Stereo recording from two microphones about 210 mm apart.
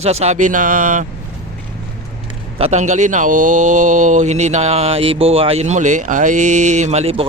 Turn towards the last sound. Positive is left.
turn(degrees=-30)  # may be behind; listen again after turning